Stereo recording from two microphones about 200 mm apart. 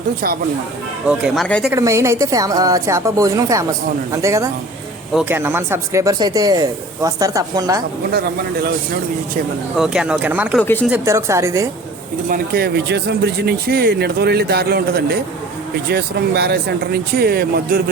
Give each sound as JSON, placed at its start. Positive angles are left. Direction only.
{"t": 1.0, "sound": "speech", "side_deg": -5}
{"t": 1.7, "sound": "a woman's voice", "side_deg": -15}
{"t": 9.7, "sound": "speech", "side_deg": 0}
{"t": 10.6, "sound": "speech", "side_deg": 10}
{"t": 10.8, "sound": "a woman's voice", "side_deg": -10}
{"t": 12.3, "sound": "speech", "side_deg": -50}